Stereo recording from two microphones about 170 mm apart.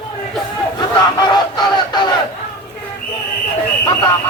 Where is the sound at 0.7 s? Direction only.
25° left (ahead or behind).